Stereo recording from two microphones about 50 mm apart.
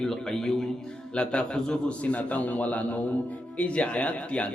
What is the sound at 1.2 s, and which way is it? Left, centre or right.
A man's voice, centre.